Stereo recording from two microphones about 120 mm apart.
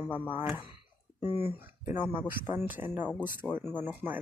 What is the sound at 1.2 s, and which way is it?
Speech, 20° right (ahead or behind).